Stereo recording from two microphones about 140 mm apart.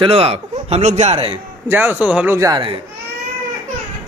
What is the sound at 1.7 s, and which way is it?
Speech, 15° right (ahead or behind).